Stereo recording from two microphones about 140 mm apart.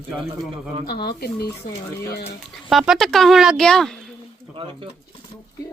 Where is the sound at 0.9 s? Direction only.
90° left.